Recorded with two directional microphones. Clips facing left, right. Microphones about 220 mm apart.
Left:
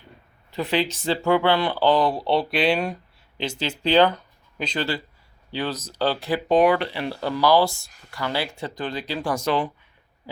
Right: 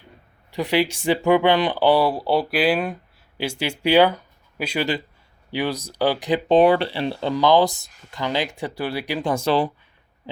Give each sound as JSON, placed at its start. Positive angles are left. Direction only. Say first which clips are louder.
{"t": 0.5, "sound": "speech", "louder": "right 3 dB", "side_deg": -10}
{"t": 9.3, "sound": "speech", "louder": "right 3 dB", "side_deg": -30}